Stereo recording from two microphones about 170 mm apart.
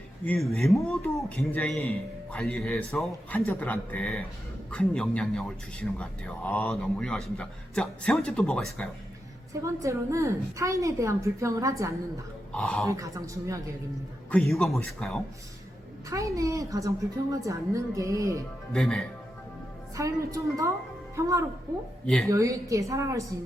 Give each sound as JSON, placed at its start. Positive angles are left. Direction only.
{"t": 0.3, "sound": "a man's voice", "side_deg": 0}
{"t": 9.6, "sound": "a woman's voice", "side_deg": -20}
{"t": 12.5, "sound": "speech", "side_deg": 5}
{"t": 12.9, "sound": "a woman's voice", "side_deg": -20}
{"t": 14.3, "sound": "a man's voice", "side_deg": 0}
{"t": 16.0, "sound": "a woman's voice", "side_deg": -20}
{"t": 18.7, "sound": "a man's voice", "side_deg": 0}
{"t": 20.0, "sound": "a woman's voice", "side_deg": -20}
{"t": 22.0, "sound": "a woman's voice", "side_deg": 5}
{"t": 22.3, "sound": "a woman's voice", "side_deg": -20}